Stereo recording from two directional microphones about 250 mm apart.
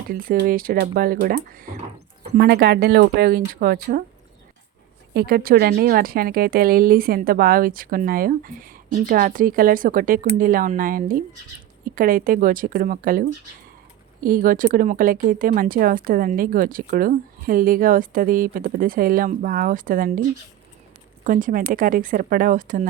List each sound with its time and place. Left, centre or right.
0.1 s speech: right
2.4 s speech: right
5.1 s speech: right
14.3 s speech: right
21.2 s speech: right